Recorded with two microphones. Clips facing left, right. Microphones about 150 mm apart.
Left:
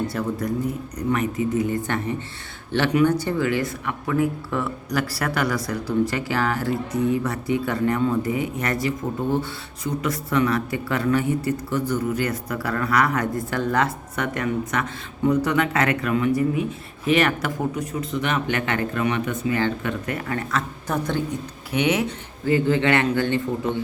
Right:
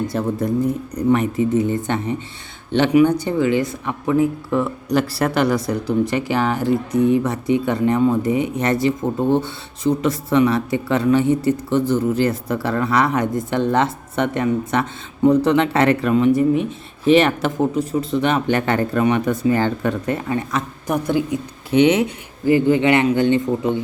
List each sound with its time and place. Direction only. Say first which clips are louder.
0.1 s speech: right 5 dB; 25° right (ahead or behind)
21.7 s speech: right 7 dB; 25° right (ahead or behind)
22.0 s a man's voice: right 6 dB; 15° right (ahead or behind)